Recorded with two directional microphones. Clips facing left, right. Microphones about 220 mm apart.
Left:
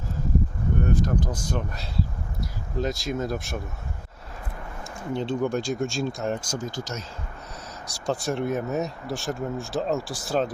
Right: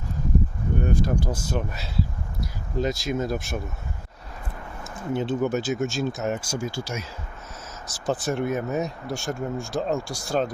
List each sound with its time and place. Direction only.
0.9 s speech: 10° right (ahead or behind)
4.8 s speech: 5° right (ahead or behind)